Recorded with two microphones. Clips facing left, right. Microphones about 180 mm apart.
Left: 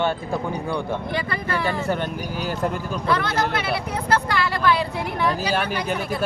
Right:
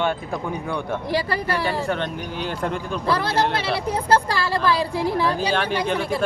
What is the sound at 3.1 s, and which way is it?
Speech, 30° right (ahead or behind).